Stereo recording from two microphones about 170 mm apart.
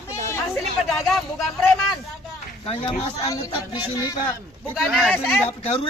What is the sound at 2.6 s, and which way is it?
Speech, 35° left (ahead or behind).